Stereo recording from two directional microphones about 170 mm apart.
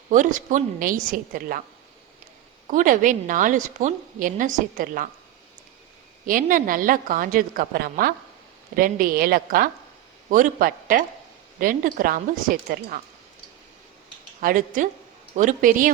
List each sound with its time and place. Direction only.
0.1 s a woman's voice: 50° right (ahead or behind)
2.6 s a woman's voice: 50° right (ahead or behind)
6.2 s a woman's voice: 55° right (ahead or behind)
14.4 s a woman's voice: 50° right (ahead or behind)